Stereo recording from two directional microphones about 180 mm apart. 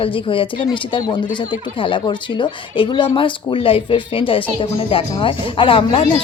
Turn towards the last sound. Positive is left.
turn(degrees=30)  # may be behind; listen again after turning